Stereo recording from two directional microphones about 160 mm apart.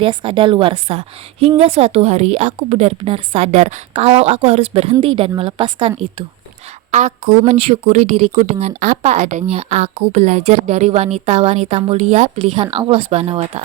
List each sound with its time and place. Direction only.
0.0 s a woman's voice: 30° right (ahead or behind)
6.9 s a woman's voice: 50° right (ahead or behind)